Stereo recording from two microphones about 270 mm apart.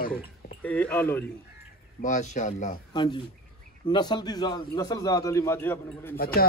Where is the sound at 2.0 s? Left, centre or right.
Left; by 6.2 s centre.